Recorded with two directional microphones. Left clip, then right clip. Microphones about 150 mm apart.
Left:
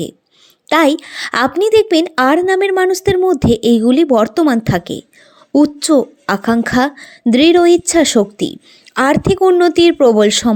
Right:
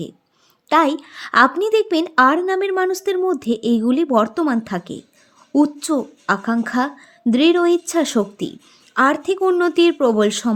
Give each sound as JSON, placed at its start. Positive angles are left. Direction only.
{"t": 0.7, "sound": "speech", "side_deg": 30}